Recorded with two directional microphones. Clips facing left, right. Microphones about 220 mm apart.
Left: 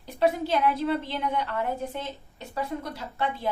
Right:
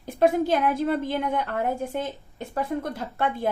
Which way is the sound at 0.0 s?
50° right (ahead or behind).